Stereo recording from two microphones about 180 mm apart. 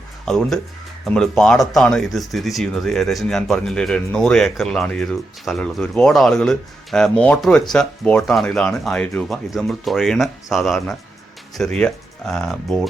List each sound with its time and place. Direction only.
0.3 s speech: centre (ahead or behind)